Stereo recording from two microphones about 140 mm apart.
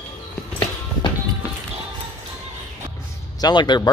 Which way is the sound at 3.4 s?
30° left (ahead or behind).